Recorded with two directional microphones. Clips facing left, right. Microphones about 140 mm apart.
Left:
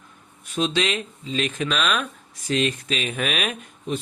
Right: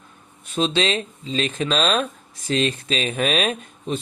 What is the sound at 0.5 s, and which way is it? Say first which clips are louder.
Speech: right 2 dB; 25° right (ahead or behind).